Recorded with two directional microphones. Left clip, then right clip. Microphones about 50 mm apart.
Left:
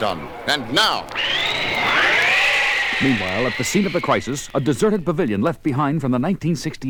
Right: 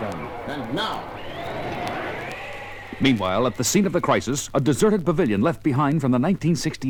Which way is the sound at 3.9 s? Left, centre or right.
Right.